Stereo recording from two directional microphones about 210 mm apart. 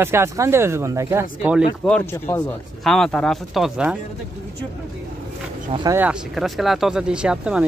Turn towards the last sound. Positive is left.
turn(degrees=-5)  # may be behind; listen again after turning